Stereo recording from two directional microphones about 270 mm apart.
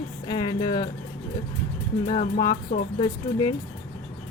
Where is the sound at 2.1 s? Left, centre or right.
Left.